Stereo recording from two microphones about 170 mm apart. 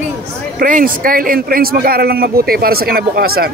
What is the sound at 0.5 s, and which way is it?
A man's voice, 55° right (ahead or behind).